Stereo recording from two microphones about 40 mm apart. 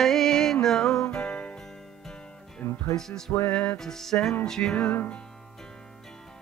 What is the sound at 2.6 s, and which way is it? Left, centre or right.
Speech, left.